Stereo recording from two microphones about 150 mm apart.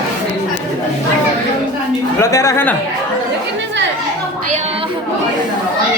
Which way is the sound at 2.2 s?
20° left (ahead or behind).